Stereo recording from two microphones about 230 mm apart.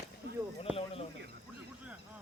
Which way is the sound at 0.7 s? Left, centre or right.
Centre.